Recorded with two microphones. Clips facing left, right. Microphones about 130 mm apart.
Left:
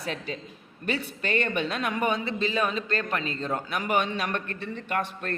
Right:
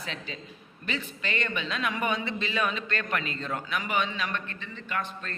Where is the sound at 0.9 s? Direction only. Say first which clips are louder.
Left 4 dB; 50° left (ahead or behind).